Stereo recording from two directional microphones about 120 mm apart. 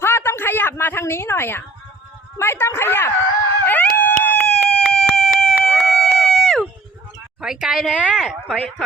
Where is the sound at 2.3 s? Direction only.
20° left (ahead or behind).